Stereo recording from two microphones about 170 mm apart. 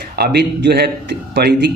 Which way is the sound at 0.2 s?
70° right (ahead or behind).